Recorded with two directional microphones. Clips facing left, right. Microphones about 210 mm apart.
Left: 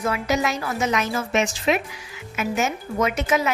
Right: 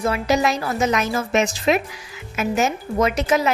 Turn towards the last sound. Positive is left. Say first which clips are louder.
# right 3 dB
turn(degrees=-35)  # may be behind; listen again after turning